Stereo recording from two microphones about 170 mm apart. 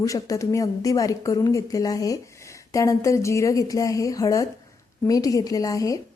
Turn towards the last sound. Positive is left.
turn(degrees=20)  # may be behind; listen again after turning